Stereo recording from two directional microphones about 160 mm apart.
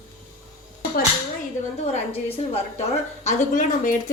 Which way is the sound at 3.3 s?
50° left (ahead or behind).